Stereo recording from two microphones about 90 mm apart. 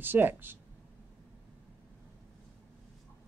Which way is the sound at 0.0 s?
25° right (ahead or behind).